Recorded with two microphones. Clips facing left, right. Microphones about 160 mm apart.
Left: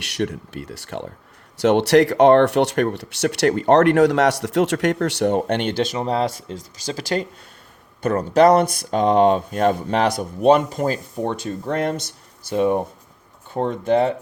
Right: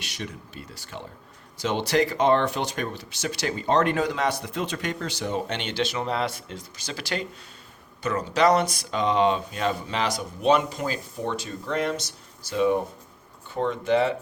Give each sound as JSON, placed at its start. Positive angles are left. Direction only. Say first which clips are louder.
{"t": 0.0, "sound": "speech", "louder": "left 11 dB", "side_deg": 65}
{"t": 8.0, "sound": "speech", "louder": "left 7 dB", "side_deg": 55}